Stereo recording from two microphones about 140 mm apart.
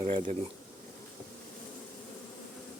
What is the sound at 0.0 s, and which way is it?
Speech, 50° right (ahead or behind).